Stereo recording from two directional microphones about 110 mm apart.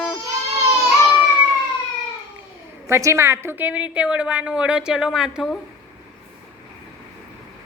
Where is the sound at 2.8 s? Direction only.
25° right (ahead or behind); by 5.5 s 5° right (ahead or behind).